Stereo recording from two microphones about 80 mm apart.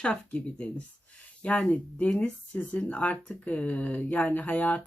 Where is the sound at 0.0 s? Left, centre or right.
Centre.